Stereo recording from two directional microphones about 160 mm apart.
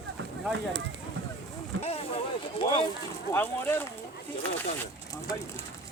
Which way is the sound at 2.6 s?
35° left (ahead or behind).